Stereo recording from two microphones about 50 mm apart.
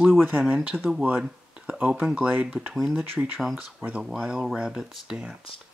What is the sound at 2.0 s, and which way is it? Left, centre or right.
Speech, right.